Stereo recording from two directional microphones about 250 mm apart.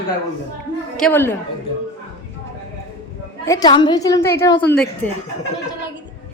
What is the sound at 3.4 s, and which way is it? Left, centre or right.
A woman's voice, centre.